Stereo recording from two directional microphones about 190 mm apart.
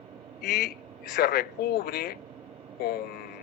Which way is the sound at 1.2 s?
55° left (ahead or behind).